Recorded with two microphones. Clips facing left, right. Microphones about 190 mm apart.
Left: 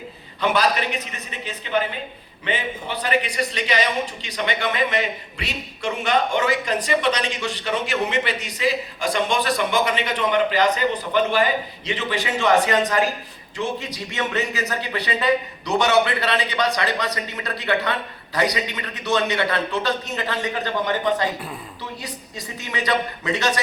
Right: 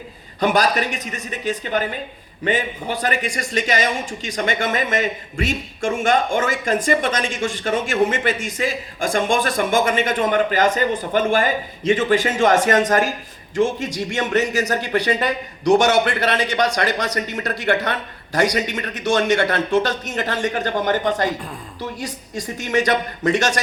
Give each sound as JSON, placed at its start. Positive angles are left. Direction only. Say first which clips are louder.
{"t": 0.3, "sound": "a man's voice", "louder": "right 3 dB", "side_deg": -45}